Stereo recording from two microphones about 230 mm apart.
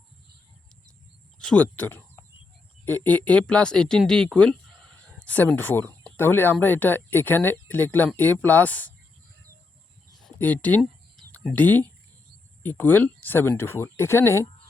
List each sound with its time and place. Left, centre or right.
1.4 s speech: centre
10.2 s speech: centre